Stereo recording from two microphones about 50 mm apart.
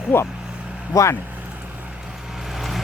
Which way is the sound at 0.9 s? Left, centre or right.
Left.